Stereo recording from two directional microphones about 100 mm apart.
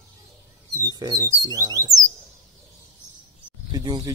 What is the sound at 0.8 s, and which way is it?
Speech, 40° right (ahead or behind).